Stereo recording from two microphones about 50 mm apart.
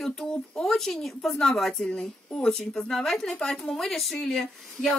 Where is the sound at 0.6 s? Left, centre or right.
Centre.